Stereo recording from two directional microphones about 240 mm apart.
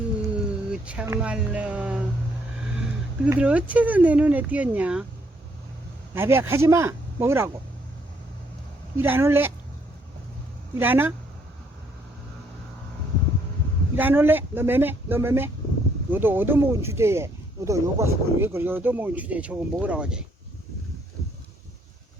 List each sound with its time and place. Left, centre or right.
0.7 s speech: centre
6.1 s speech: centre
9.0 s speech: centre
10.8 s speech: centre
13.9 s speech: centre